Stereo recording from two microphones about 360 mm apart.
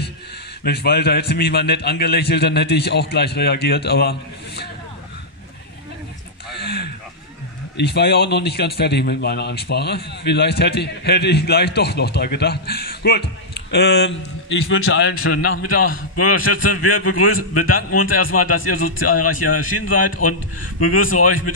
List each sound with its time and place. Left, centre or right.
0.7 s a man's voice: left
6.6 s a sound: left
7.7 s a man's voice: left
16.2 s a man's voice: left